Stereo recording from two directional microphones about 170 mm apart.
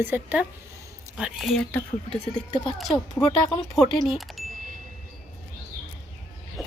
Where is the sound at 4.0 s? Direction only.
Centre (ahead or behind).